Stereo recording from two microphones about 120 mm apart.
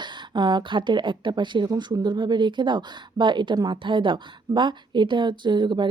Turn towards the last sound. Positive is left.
turn(degrees=-40)  # may be behind; listen again after turning